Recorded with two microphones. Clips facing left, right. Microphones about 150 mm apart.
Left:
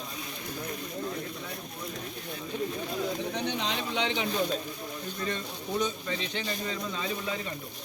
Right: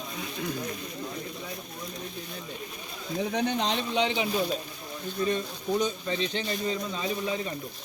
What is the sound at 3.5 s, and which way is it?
Speech, 40° right (ahead or behind).